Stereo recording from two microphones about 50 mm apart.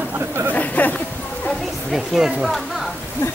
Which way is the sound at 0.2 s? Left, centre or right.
Right.